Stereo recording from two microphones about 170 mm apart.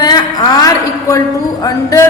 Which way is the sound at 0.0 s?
25° left (ahead or behind).